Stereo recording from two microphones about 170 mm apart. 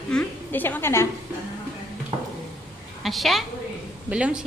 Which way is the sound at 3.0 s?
Centre (ahead or behind).